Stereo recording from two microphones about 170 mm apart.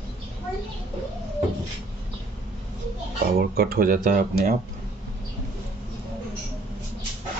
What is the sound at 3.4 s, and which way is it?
Speech, 65° right (ahead or behind).